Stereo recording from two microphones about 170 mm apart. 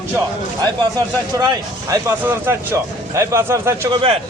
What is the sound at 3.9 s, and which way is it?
Speech, 30° right (ahead or behind).